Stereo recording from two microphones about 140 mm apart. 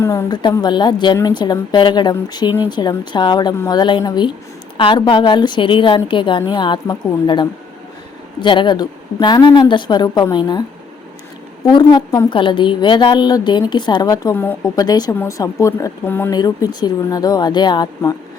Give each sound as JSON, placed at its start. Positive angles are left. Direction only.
{"t": 0.0, "sound": "a woman's voice", "side_deg": 20}
{"t": 0.3, "sound": "a woman's voice", "side_deg": 30}
{"t": 11.6, "sound": "a woman's voice", "side_deg": 30}
{"t": 16.3, "sound": "a woman's voice", "side_deg": 30}